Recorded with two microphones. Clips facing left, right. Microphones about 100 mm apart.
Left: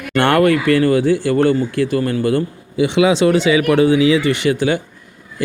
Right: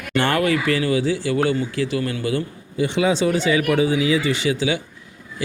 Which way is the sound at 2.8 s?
75° left (ahead or behind).